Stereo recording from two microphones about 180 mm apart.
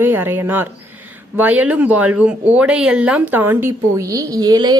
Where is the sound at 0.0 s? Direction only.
10° right (ahead or behind).